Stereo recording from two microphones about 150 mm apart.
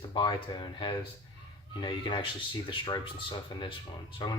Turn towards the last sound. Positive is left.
turn(degrees=30)  # may be behind; listen again after turning